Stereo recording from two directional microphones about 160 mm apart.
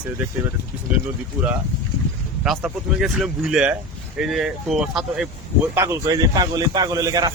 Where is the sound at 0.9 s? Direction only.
10° right (ahead or behind).